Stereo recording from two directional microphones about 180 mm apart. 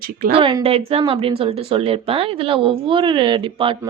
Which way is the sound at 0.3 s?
30° right (ahead or behind).